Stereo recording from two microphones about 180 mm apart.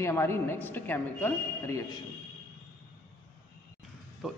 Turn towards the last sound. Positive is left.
turn(degrees=0)  # may be behind; listen again after turning